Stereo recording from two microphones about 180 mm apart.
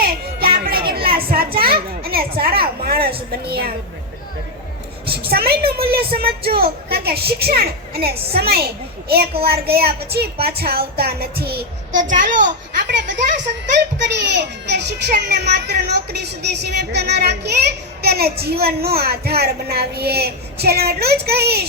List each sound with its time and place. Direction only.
0.3 s music: 55° right (ahead or behind)
1.5 s children playing: 60° right (ahead or behind)
3.4 s a child's voice: 60° right (ahead or behind)
5.0 s a child's voice: 60° right (ahead or behind)
11.9 s a child's voice: 45° right (ahead or behind)
13.7 s a child's voice: 70° right (ahead or behind)